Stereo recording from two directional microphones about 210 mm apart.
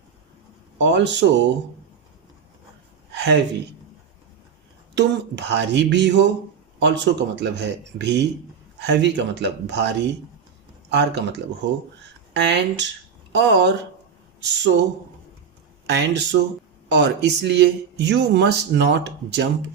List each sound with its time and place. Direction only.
0.8 s speech: 55° right (ahead or behind)
3.1 s a sound: 55° right (ahead or behind)
4.9 s speech: 55° right (ahead or behind)
15.9 s speech: 55° right (ahead or behind)